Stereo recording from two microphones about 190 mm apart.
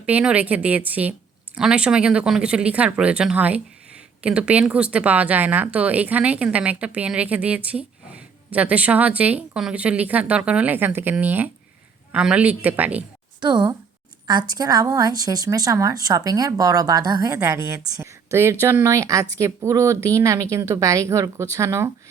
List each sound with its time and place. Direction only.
0.0 s speech: 5° right (ahead or behind)
13.4 s a woman's voice: 25° right (ahead or behind)